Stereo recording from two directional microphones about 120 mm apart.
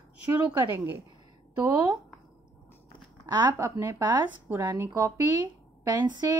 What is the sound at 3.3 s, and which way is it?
A woman's voice, 30° right (ahead or behind).